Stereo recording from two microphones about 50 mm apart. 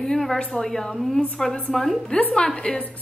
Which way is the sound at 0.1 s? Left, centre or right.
Centre.